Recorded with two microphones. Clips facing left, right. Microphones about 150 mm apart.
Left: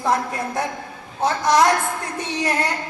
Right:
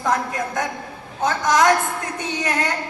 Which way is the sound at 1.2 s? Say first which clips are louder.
Even; 30° left (ahead or behind).